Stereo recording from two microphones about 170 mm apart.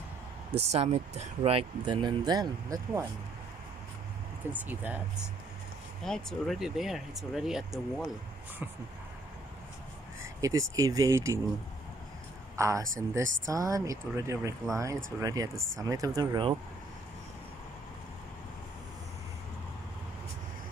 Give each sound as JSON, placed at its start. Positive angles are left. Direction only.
{"t": 0.6, "sound": "speech", "side_deg": -40}
{"t": 4.5, "sound": "speech", "side_deg": -10}
{"t": 6.0, "sound": "speech", "side_deg": 5}
{"t": 10.4, "sound": "speech", "side_deg": -20}
{"t": 12.5, "sound": "speech", "side_deg": -20}